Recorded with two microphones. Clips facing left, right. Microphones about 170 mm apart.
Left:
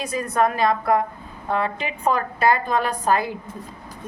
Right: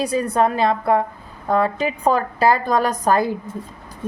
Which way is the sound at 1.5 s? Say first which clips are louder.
Right 5 dB; 40° right (ahead or behind).